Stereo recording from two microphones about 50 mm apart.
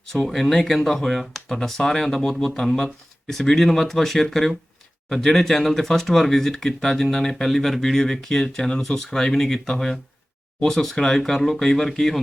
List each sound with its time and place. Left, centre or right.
0.3 s speech: centre